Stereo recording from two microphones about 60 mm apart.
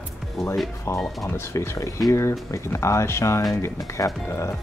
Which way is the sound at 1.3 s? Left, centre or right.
Left.